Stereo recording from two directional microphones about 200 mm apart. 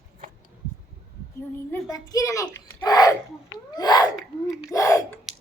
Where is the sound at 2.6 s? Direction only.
20° left (ahead or behind).